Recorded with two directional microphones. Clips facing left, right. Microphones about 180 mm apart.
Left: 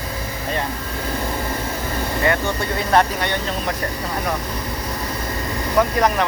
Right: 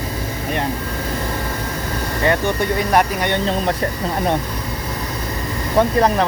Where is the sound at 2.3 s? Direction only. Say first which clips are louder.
Right 5 dB; 15° right (ahead or behind).